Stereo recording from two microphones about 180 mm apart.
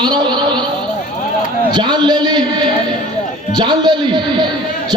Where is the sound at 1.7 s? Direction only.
25° right (ahead or behind).